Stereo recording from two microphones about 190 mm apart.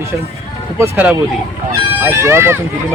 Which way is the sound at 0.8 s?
10° right (ahead or behind).